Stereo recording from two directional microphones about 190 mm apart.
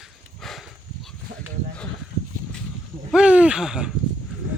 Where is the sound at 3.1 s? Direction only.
5° right (ahead or behind).